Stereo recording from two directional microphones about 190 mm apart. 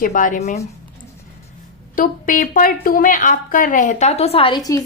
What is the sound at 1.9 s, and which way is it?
Speech, 45° left (ahead or behind).